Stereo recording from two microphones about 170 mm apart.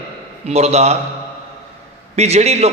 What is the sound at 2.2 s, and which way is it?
Speech, 40° right (ahead or behind).